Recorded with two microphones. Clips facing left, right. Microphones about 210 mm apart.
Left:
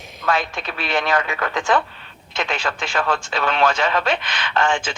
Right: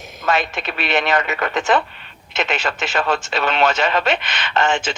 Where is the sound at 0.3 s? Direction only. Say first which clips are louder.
Right 2 dB; 25° right (ahead or behind).